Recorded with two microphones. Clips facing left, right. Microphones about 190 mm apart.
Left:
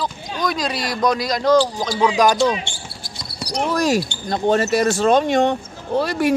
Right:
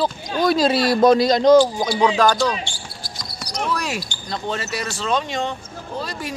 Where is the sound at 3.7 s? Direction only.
40° left (ahead or behind); by 6.3 s 65° left (ahead or behind).